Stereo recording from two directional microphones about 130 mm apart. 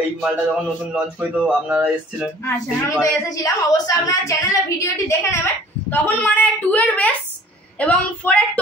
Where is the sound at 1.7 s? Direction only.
5° right (ahead or behind).